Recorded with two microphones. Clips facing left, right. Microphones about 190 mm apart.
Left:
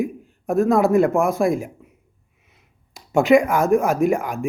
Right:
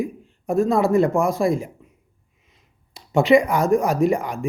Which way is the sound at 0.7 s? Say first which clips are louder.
Left 2 dB; centre (ahead or behind).